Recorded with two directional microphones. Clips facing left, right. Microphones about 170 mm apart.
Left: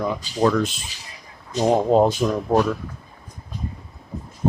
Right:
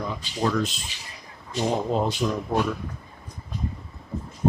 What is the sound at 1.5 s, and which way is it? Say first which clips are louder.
Speech: left 7 dB; 45° left (ahead or behind).